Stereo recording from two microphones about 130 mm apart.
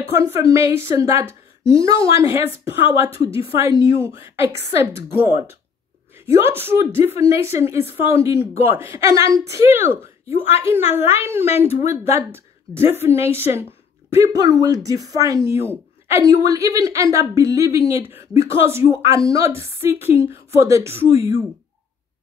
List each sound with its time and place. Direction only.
0.1 s speech: 25° right (ahead or behind)
11.0 s a woman's voice: 20° right (ahead or behind)
11.4 s speech: 50° left (ahead or behind)
11.9 s speech: 20° right (ahead or behind)